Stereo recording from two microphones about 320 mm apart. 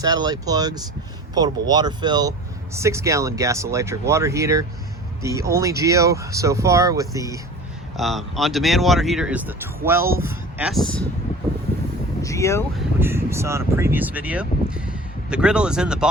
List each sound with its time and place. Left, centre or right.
0.0 s speech: centre
7.9 s speech: centre
12.2 s speech: centre
13.0 s speech: centre